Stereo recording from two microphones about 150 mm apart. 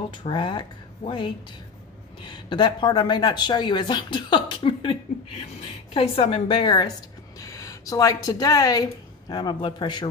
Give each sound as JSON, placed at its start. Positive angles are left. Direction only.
{"t": 0.2, "sound": "a woman's voice", "side_deg": 35}
{"t": 7.3, "sound": "a man's voice", "side_deg": 20}